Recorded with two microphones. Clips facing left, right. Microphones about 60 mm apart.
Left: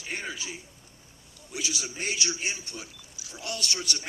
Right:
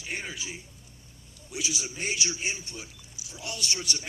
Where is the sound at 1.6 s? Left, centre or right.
Right.